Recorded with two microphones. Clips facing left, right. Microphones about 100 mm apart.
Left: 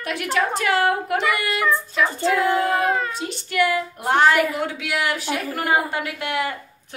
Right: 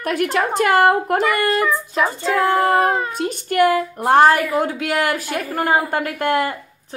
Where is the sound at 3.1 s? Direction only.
50° right (ahead or behind).